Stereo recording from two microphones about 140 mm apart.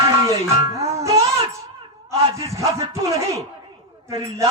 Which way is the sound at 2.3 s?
20° right (ahead or behind).